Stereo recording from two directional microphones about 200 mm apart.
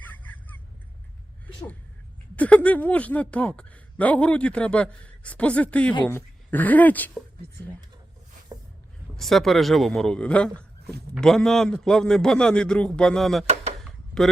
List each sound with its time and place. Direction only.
0.0 s fowl: 10° left (ahead or behind)
2.3 s speech: 5° left (ahead or behind)
8.5 s a sound: 20° right (ahead or behind)
9.1 s a man's voice: centre (ahead or behind)